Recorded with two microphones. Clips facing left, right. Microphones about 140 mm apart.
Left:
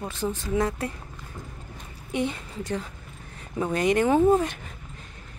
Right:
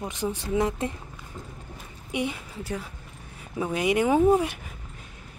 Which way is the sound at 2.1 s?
10° right (ahead or behind).